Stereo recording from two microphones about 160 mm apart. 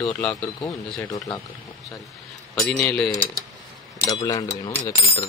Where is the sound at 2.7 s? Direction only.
5° left (ahead or behind).